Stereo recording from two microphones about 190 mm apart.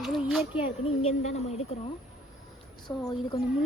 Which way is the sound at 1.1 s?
40° left (ahead or behind).